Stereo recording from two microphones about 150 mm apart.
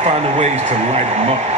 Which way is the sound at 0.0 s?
45° right (ahead or behind).